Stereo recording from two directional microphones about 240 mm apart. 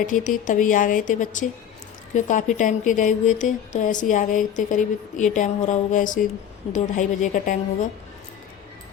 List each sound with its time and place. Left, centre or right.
0.0 s a woman's voice: left